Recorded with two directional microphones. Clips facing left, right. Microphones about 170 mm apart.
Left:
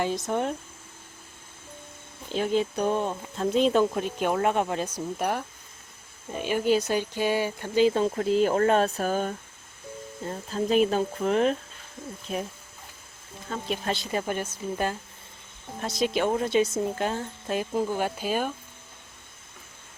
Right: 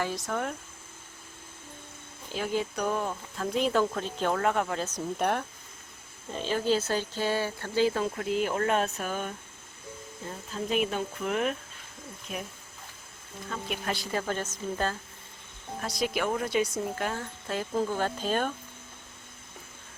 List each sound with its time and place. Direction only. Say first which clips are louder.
0.3 s speech: left 5 dB; 20° left (ahead or behind)
2.3 s speech: left 5 dB; 20° left (ahead or behind); by 5.5 s centre (ahead or behind)
6.3 s speech: left 3 dB; 15° left (ahead or behind); by 9.3 s 35° left (ahead or behind)
10.5 s speech: left 6 dB; 35° left (ahead or behind)
13.5 s speech: left 4 dB; 30° left (ahead or behind); by 14.9 s 10° left (ahead or behind)
15.8 s speech: left 4 dB; 25° left (ahead or behind); by 18.5 s 10° left (ahead or behind)